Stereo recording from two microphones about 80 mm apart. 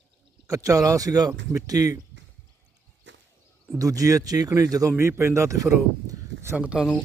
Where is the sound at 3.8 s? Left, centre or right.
Right.